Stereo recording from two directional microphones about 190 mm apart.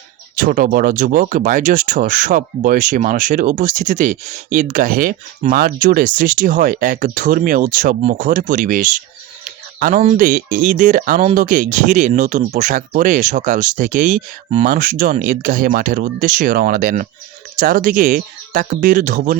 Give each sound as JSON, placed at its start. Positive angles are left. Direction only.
{"t": 0.3, "sound": "speech", "side_deg": -45}